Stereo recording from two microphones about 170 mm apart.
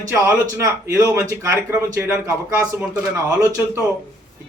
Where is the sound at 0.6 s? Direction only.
15° right (ahead or behind).